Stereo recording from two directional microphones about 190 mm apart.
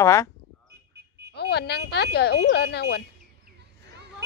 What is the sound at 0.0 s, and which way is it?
Speech, 15° left (ahead or behind).